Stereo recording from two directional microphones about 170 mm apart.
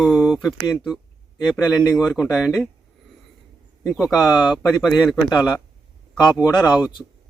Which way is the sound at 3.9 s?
Centre (ahead or behind).